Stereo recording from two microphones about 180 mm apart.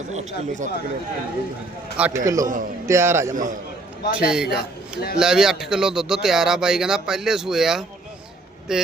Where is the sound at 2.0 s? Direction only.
5° right (ahead or behind).